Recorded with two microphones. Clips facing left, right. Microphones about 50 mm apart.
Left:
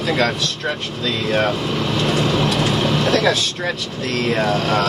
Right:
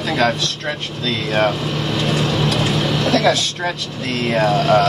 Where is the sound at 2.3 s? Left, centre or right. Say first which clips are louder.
Left 1 dB; left.